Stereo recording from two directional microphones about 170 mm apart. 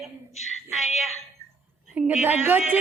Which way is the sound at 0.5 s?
40° left (ahead or behind).